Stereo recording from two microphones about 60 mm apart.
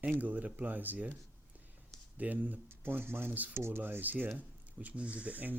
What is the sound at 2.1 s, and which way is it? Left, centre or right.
Speech, right.